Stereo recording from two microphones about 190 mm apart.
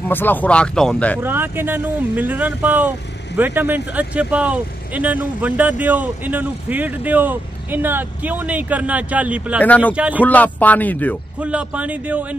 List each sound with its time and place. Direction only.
0.1 s speech: 10° left (ahead or behind)
1.2 s speech: 10° right (ahead or behind)
9.6 s speech: 10° left (ahead or behind)
9.9 s speech: 5° right (ahead or behind)
10.2 s speech: 10° left (ahead or behind)
11.4 s speech: 5° right (ahead or behind)